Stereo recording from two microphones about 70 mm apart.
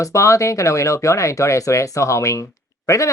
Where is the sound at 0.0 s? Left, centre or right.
Left.